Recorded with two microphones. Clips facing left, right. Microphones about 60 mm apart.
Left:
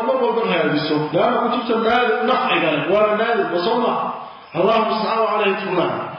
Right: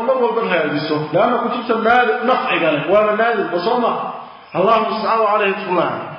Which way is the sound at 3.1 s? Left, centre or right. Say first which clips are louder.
Right 2 dB; right.